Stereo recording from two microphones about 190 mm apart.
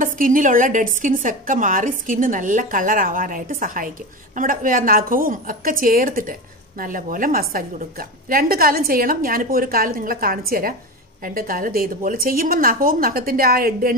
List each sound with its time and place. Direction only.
0.0 s a woman's voice: 45° right (ahead or behind)